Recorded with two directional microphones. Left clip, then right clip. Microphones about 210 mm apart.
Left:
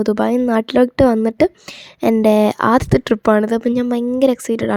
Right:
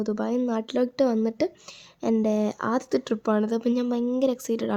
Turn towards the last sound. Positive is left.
turn(degrees=30)  # may be behind; listen again after turning